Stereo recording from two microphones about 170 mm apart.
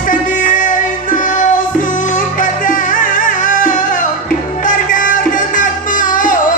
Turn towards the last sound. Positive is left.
turn(degrees=50)  # may be behind; listen again after turning